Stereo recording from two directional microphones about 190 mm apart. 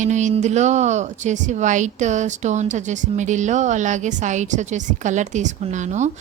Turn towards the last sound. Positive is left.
turn(degrees=-40)  # may be behind; listen again after turning